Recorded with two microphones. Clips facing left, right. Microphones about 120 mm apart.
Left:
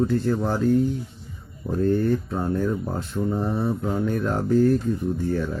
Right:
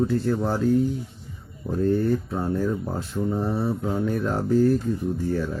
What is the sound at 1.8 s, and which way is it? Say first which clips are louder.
Mantra: left 1 dB; 5° right (ahead or behind).